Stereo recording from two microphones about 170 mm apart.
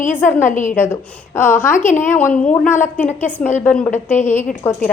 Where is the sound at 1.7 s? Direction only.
45° left (ahead or behind).